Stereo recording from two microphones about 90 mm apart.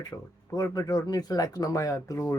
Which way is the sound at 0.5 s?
40° left (ahead or behind).